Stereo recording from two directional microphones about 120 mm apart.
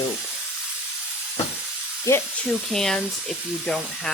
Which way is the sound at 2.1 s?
25° left (ahead or behind).